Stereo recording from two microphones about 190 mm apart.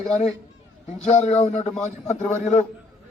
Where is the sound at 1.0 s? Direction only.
35° left (ahead or behind).